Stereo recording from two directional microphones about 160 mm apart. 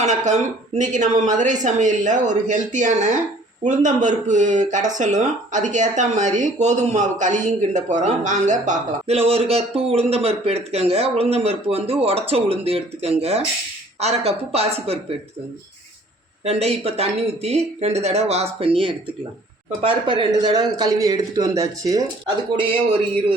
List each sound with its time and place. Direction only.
0.0 s speech: 50° right (ahead or behind)
16.4 s a man's voice: 40° right (ahead or behind); by 22.0 s 20° right (ahead or behind)